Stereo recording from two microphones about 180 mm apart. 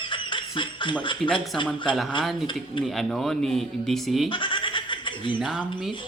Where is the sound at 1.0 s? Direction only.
25° left (ahead or behind).